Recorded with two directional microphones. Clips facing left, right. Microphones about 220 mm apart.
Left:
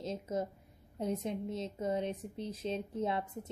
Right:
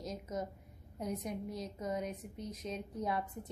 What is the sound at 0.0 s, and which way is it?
A woman's voice, 30° left (ahead or behind).